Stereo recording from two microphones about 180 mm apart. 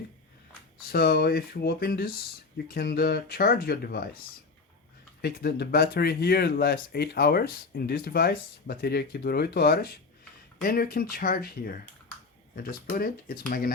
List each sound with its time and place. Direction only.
0.9 s speech: 60° left (ahead or behind)
5.2 s speech: 60° left (ahead or behind)